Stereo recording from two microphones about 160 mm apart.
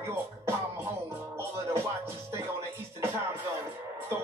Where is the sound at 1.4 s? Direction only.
15° right (ahead or behind).